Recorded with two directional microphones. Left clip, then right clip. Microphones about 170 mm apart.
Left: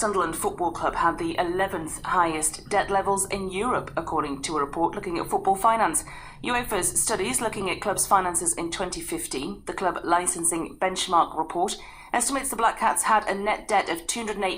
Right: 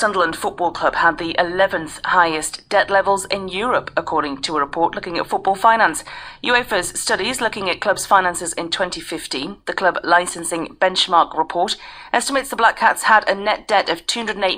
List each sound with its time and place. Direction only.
0.4 s a woman's voice: 30° right (ahead or behind)
12.1 s a woman's voice: 30° right (ahead or behind)